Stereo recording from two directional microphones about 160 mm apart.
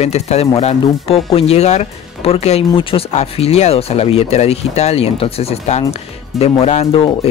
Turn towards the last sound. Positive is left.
turn(degrees=40)  # may be behind; listen again after turning